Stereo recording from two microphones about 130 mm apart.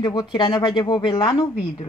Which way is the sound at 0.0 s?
35° left (ahead or behind).